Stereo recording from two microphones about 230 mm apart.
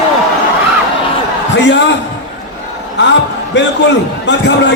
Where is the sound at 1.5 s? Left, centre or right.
Left.